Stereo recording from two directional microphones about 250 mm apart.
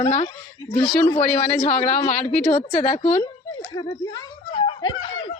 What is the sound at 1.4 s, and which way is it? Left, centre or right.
A woman's voice, left.